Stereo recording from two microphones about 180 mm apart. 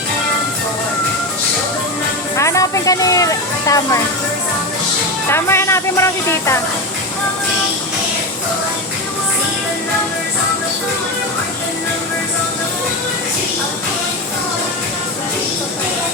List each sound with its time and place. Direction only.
2.3 s speech: 15° left (ahead or behind)
5.3 s speech: 15° left (ahead or behind)